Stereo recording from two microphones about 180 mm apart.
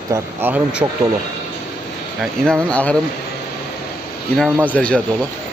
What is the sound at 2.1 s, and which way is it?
Speech, 5° left (ahead or behind).